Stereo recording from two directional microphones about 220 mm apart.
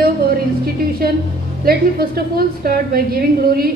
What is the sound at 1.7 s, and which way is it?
A woman's voice, 45° right (ahead or behind).